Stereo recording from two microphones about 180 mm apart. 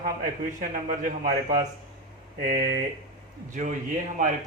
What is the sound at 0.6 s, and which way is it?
A man's voice, 50° right (ahead or behind).